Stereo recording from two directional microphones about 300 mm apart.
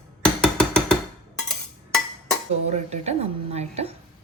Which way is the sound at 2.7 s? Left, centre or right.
Right.